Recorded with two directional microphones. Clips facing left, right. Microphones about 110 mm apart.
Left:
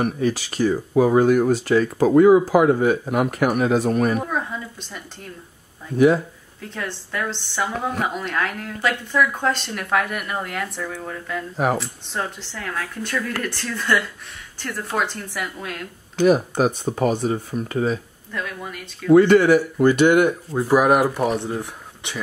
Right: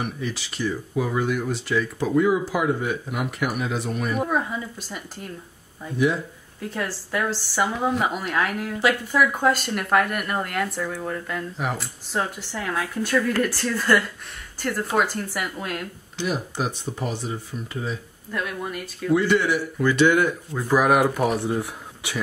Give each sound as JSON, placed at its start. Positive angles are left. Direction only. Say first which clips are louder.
{"t": 0.0, "sound": "speech", "louder": "left 8 dB", "side_deg": 45}
{"t": 4.2, "sound": "speech", "louder": "right 2 dB", "side_deg": -5}
{"t": 5.9, "sound": "speech", "louder": "left 7 dB", "side_deg": 45}
{"t": 6.7, "sound": "speech", "louder": "right 1 dB", "side_deg": -5}
{"t": 16.2, "sound": "speech", "louder": "left 10 dB", "side_deg": 50}
{"t": 18.3, "sound": "speech", "louder": "right 2 dB", "side_deg": -5}
{"t": 19.1, "sound": "speech", "louder": "left 8 dB", "side_deg": 50}
{"t": 20.6, "sound": "speech", "louder": "left 2 dB", "side_deg": 5}